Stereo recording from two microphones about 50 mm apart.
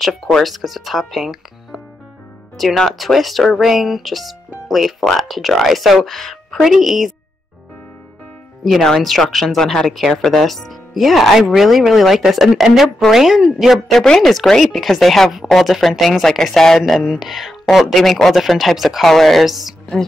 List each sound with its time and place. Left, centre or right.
0.4 s speech: centre
9.0 s speech: centre
14.0 s speech: centre